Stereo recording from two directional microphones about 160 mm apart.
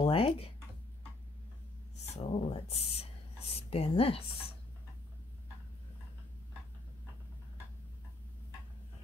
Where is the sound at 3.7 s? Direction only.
35° left (ahead or behind).